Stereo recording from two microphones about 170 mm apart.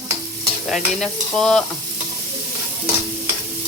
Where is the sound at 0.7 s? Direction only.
Centre (ahead or behind).